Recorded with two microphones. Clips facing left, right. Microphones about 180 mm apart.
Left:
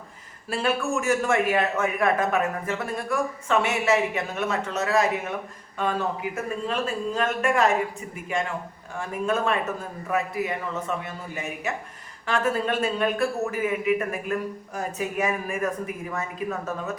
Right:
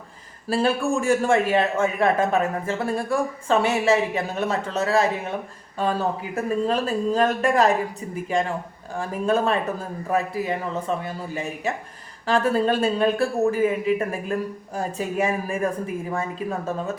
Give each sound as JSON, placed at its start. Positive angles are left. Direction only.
{"t": 0.4, "sound": "a man's voice", "side_deg": -35}